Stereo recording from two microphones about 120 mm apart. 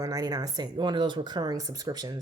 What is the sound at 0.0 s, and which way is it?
A woman's voice, 30° right (ahead or behind).